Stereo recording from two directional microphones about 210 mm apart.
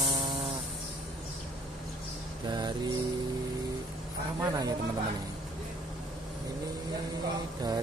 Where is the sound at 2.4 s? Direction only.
20° right (ahead or behind).